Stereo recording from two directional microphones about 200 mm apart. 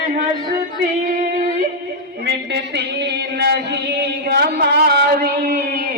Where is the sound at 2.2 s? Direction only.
55° right (ahead or behind).